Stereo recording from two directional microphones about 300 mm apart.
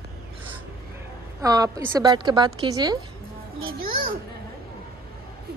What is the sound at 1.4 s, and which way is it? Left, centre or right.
A woman's voice, centre.